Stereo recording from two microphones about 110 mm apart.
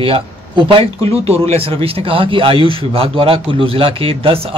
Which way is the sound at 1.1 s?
70° right (ahead or behind).